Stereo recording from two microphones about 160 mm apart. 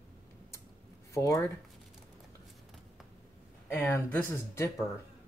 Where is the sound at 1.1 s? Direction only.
20° left (ahead or behind).